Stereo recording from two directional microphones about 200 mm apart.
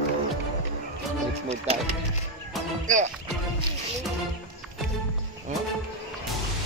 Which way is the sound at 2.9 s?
40° right (ahead or behind).